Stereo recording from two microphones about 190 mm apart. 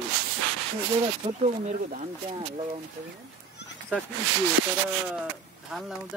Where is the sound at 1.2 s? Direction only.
35° right (ahead or behind).